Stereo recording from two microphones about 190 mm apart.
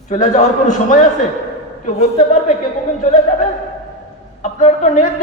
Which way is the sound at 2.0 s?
35° left (ahead or behind).